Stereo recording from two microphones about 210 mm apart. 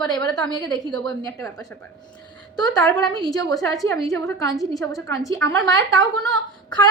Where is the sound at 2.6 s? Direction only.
20° left (ahead or behind).